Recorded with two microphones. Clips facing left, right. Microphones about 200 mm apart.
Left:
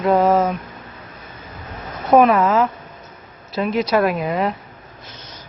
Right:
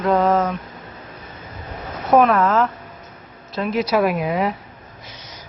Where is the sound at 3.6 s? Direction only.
Centre (ahead or behind).